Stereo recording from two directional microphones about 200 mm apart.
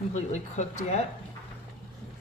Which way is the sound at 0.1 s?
35° left (ahead or behind).